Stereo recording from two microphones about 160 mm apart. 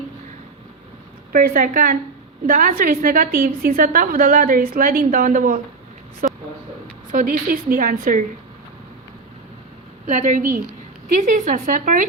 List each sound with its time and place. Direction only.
1.3 s a woman's voice: 65° right (ahead or behind)
6.2 s a sound: 55° right (ahead or behind)
7.1 s a woman's voice: 60° right (ahead or behind)
10.1 s speech: 50° right (ahead or behind)